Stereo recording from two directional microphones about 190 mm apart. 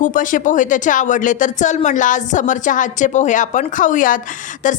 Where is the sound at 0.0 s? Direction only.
45° left (ahead or behind).